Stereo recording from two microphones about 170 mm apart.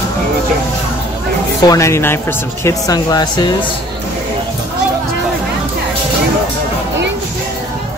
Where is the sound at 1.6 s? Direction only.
20° left (ahead or behind).